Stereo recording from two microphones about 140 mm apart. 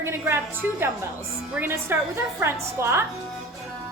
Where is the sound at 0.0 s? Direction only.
15° right (ahead or behind).